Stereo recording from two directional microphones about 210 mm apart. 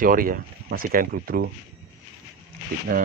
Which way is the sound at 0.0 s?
40° right (ahead or behind).